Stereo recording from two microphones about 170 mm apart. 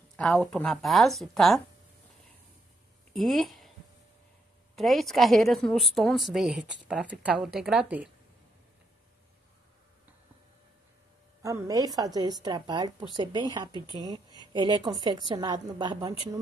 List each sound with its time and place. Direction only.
0.1 s a woman's voice: 5° left (ahead or behind)
3.1 s a sound: centre (ahead or behind)
4.7 s a woman's voice: centre (ahead or behind)
11.4 s speech: 20° right (ahead or behind)